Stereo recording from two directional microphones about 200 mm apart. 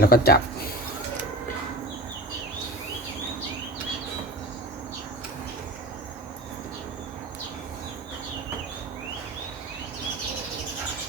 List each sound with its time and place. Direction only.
0.0 s speech: 50° left (ahead or behind)